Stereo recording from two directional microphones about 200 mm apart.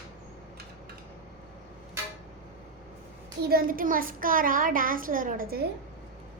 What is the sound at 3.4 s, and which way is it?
A child's voice, 45° right (ahead or behind).